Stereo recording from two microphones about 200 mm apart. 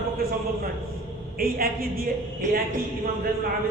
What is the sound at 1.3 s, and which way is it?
Speech, 50° right (ahead or behind).